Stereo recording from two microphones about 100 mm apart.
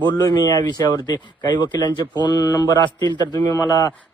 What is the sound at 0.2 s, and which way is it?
Speech, 40° left (ahead or behind).